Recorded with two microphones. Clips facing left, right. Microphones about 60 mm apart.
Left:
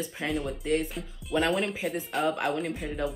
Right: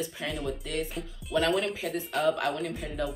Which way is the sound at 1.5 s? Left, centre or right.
Centre.